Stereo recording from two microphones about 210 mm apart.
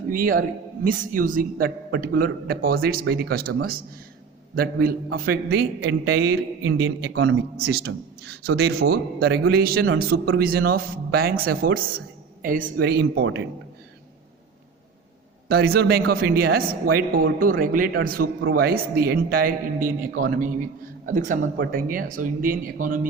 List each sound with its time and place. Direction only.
0.1 s speech: 40° right (ahead or behind)
15.4 s speech: 50° right (ahead or behind)